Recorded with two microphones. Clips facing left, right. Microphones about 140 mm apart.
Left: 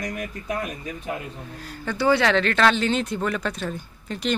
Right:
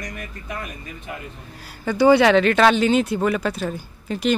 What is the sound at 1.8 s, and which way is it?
Speech, 10° right (ahead or behind).